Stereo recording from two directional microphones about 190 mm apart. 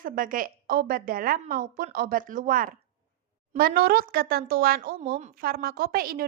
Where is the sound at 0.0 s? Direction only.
45° right (ahead or behind).